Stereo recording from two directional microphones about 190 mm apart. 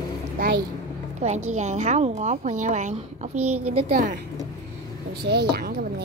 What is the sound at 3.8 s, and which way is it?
Speech, 50° right (ahead or behind).